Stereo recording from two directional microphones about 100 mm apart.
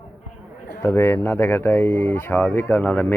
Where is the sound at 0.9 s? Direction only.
25° left (ahead or behind).